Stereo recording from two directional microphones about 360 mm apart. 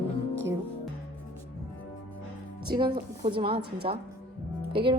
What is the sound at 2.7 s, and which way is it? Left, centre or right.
Speech, centre.